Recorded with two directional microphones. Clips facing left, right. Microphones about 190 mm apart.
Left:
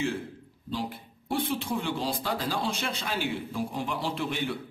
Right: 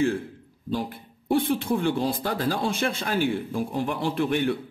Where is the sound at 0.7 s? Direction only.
50° right (ahead or behind).